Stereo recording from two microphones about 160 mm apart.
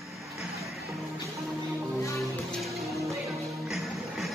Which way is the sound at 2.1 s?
Centre (ahead or behind).